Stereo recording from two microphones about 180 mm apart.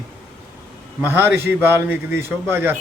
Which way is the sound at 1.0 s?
10° right (ahead or behind).